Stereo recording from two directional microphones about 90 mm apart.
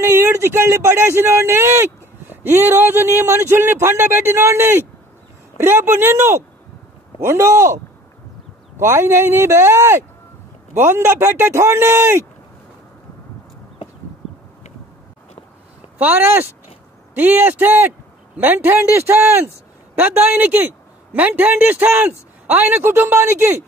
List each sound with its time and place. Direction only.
0.0 s speech: 30° right (ahead or behind)
16.0 s speech: 20° right (ahead or behind)